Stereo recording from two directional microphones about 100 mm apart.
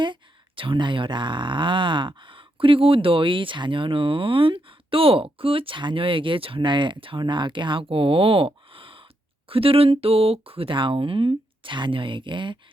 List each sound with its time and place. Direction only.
0.0 s speech: 55° right (ahead or behind)